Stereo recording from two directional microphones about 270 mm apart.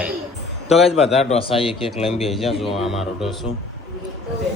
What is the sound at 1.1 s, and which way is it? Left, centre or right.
Speech, left.